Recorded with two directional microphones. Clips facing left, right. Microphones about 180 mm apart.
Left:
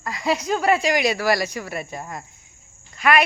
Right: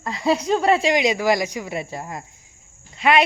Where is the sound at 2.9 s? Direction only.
25° right (ahead or behind).